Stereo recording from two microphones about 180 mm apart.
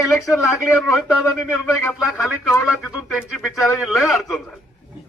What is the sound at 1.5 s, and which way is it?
Speech, 15° left (ahead or behind).